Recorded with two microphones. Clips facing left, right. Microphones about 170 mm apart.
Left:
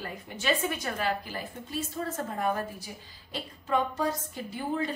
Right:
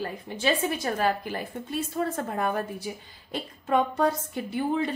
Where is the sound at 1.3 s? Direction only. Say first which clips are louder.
Right 4 dB; 60° right (ahead or behind).